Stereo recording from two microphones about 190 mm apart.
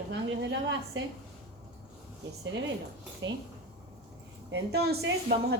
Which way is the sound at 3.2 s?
80° right.